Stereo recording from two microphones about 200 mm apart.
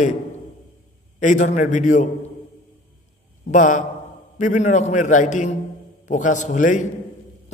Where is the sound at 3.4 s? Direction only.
40° left (ahead or behind).